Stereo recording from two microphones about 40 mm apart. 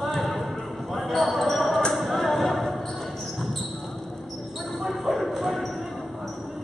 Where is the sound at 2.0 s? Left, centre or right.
Centre.